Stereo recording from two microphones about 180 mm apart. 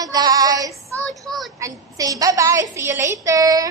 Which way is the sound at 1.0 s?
Centre (ahead or behind).